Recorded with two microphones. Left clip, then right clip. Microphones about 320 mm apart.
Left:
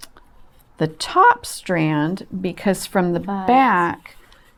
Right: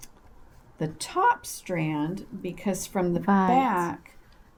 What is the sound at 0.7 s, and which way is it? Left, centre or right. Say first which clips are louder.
A woman's voice: left 12 dB; left.